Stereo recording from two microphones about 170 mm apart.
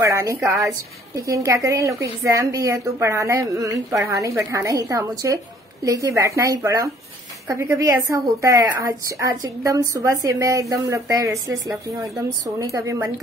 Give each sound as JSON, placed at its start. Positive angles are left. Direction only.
{"t": 0.0, "sound": "a woman's voice", "side_deg": -20}